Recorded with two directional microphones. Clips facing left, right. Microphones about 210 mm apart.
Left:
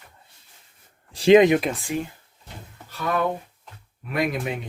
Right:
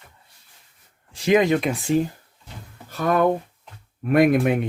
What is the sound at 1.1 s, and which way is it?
Speech, 30° left (ahead or behind).